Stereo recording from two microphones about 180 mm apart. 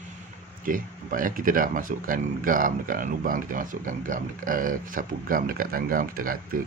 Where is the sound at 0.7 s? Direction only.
50° right (ahead or behind).